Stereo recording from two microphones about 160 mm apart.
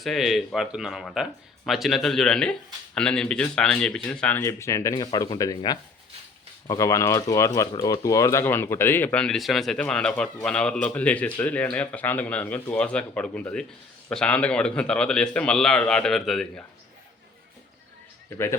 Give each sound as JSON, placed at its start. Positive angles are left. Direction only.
{"t": 0.0, "sound": "a man's voice", "side_deg": 0}
{"t": 18.3, "sound": "a man's voice", "side_deg": 15}